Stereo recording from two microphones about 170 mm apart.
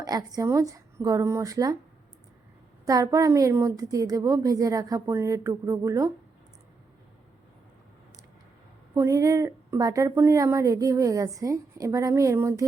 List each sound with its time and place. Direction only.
0.0 s a sound: 20° right (ahead or behind)
0.3 s a woman's voice: 20° right (ahead or behind)
2.8 s a woman's voice: 20° right (ahead or behind)
9.0 s a woman's voice: 15° right (ahead or behind)